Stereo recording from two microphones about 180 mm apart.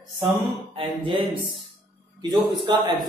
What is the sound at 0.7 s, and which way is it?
A man's voice, 30° right (ahead or behind).